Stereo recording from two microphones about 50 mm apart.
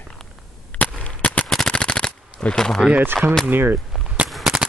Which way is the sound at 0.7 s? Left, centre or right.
Left.